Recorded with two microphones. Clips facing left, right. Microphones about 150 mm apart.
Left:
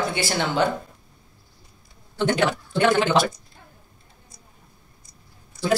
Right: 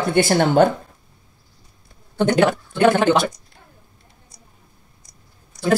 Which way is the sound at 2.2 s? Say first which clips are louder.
Right 5 dB; 50° right (ahead or behind).